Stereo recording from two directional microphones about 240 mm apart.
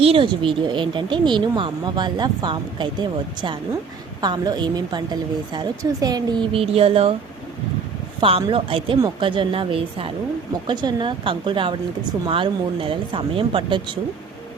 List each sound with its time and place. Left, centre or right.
0.0 s a woman's voice: right
8.2 s speech: right